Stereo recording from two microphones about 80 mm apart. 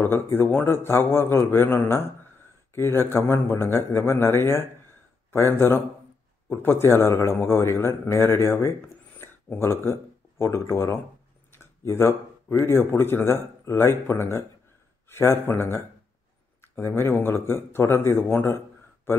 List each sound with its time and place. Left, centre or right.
0.0 s a man's voice: left